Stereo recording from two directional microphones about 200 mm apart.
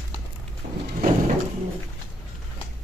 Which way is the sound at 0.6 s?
30° right (ahead or behind).